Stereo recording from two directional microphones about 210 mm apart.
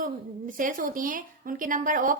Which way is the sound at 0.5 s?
40° right (ahead or behind).